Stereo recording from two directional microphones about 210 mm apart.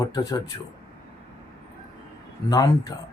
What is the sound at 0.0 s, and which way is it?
Speech, 15° left (ahead or behind).